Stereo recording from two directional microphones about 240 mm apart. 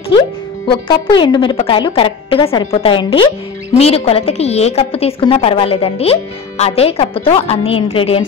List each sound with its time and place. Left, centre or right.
0.7 s a woman's voice: centre